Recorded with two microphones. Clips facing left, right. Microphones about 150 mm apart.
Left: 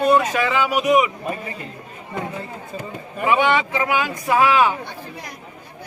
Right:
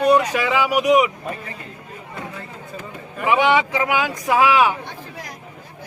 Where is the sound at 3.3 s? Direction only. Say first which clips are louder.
Right 1 dB; 15° right (ahead or behind).